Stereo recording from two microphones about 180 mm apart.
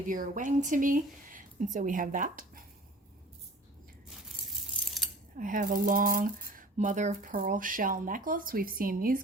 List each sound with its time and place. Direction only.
0.1 s speech: 45° right (ahead or behind)
5.0 s a sound: centre (ahead or behind)
5.4 s speech: 50° right (ahead or behind)